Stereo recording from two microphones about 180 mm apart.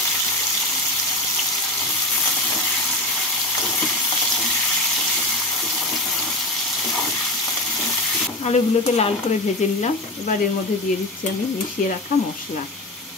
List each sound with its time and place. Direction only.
8.5 s speech: 35° left (ahead or behind)